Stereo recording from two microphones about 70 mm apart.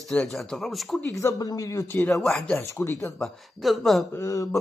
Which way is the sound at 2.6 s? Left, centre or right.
Left.